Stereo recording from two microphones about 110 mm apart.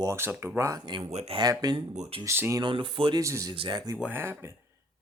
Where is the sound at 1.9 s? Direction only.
90° right.